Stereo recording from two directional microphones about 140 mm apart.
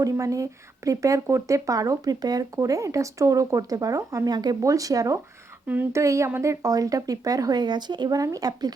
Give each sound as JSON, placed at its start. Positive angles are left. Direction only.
{"t": 0.0, "sound": "speech", "side_deg": -25}